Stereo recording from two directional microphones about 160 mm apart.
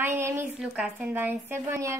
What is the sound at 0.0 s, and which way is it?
A woman's voice, 15° right (ahead or behind).